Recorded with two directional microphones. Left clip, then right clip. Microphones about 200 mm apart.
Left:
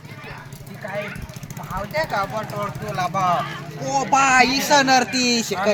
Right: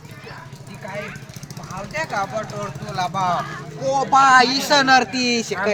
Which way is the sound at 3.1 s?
20° left (ahead or behind).